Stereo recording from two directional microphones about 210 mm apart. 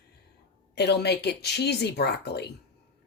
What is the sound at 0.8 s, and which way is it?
Speech, 50° left (ahead or behind).